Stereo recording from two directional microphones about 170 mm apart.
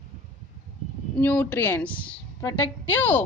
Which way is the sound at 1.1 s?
10° left (ahead or behind).